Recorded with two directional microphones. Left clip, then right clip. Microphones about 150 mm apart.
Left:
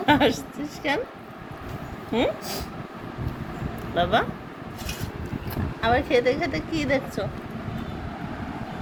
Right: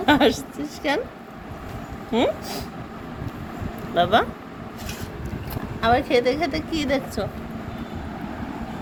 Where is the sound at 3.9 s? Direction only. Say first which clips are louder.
Right 4 dB; 30° right (ahead or behind).